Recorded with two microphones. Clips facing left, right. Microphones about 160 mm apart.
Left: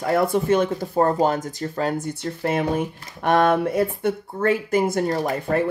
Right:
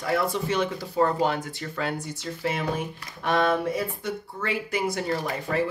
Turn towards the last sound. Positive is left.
turn(degrees=50)  # may be behind; listen again after turning